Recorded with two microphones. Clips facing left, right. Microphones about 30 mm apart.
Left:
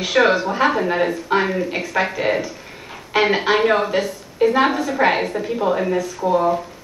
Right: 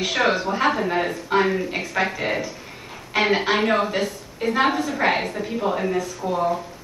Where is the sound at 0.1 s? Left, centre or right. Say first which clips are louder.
Left 7 dB; centre.